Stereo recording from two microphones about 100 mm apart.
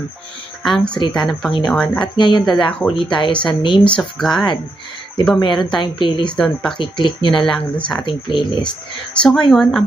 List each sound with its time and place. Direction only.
0.6 s speech: 5° left (ahead or behind)
0.9 s speech: 50° left (ahead or behind)
1.3 s speech: 5° left (ahead or behind)
2.1 s speech: 50° left (ahead or behind)
2.5 s speech: centre (ahead or behind)
3.1 s speech: 55° left (ahead or behind)
3.8 s speech: 10° left (ahead or behind)
5.4 s speech: 55° left (ahead or behind)
6.2 s speech: 5° left (ahead or behind)
6.7 s speech: 55° left (ahead or behind)
7.4 s speech: 10° left (ahead or behind)
8.0 s speech: 55° left (ahead or behind)
9.1 s speech: 5° left (ahead or behind)